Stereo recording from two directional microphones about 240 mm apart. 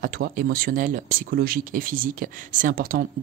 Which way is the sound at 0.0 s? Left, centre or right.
Right.